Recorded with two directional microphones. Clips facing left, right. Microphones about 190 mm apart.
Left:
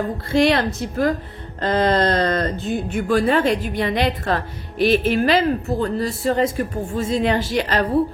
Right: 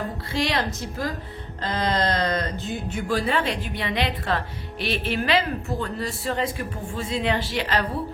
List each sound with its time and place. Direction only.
0.3 s a woman's voice: 55° left (ahead or behind)